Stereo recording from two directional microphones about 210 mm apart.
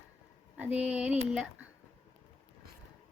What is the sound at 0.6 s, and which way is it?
Speech, 5° right (ahead or behind).